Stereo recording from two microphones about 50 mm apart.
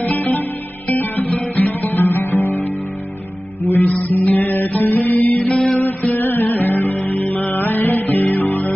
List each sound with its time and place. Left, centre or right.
0.0 s music: left
0.9 s guitar: left
2.0 s music: left
3.8 s music: left
5.4 s music: left
5.8 s music: left